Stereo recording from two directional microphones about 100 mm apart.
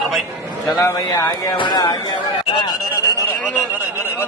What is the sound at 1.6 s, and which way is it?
Speech, 50° left (ahead or behind).